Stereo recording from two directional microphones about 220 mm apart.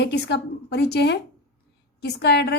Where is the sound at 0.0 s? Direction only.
50° left (ahead or behind).